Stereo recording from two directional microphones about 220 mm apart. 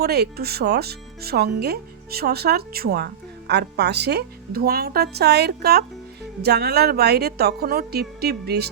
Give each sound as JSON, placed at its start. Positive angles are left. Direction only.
{"t": 0.0, "sound": "speech", "side_deg": -45}